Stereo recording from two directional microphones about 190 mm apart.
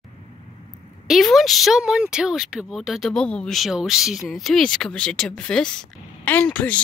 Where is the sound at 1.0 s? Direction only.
Centre (ahead or behind).